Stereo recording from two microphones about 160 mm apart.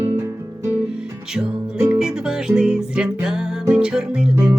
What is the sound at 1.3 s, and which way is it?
Music, 5° right (ahead or behind).